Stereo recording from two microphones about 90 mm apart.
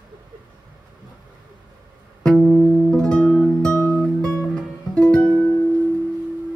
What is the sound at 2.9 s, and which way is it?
Music, 5° left (ahead or behind).